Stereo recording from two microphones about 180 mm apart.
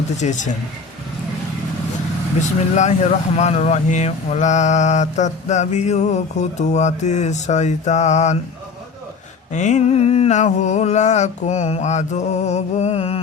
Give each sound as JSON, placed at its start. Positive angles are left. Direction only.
{"t": 0.2, "sound": "speech", "side_deg": 45}
{"t": 2.4, "sound": "speech", "side_deg": 40}
{"t": 9.5, "sound": "speech", "side_deg": 40}